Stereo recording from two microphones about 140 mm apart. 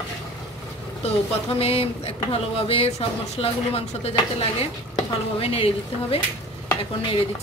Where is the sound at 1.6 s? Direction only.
45° left (ahead or behind).